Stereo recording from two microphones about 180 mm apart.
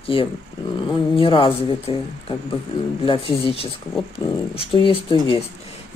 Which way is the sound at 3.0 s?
30° left (ahead or behind).